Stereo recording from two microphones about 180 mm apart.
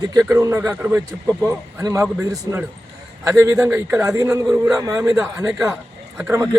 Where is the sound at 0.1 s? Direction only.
15° right (ahead or behind).